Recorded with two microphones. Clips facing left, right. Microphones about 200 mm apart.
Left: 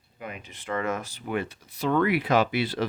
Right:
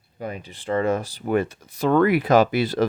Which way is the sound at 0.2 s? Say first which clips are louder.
Right 7 dB; 35° right (ahead or behind).